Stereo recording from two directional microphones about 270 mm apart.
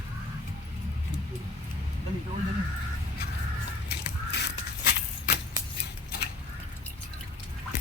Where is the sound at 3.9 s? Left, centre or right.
Left.